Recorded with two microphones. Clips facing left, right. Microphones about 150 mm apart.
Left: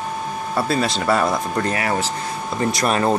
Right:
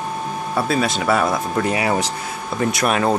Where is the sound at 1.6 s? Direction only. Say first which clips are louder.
Right 2 dB; 15° right (ahead or behind).